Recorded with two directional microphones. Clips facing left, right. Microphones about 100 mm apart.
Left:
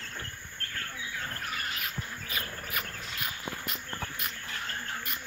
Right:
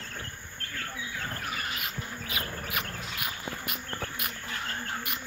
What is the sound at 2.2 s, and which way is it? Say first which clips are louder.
Insect: right 4 dB; 65° right (ahead or behind).